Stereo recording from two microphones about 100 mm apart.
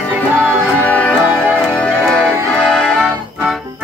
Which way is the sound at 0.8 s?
15° left (ahead or behind).